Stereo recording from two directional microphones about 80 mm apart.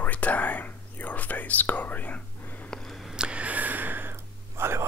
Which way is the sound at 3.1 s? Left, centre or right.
Centre.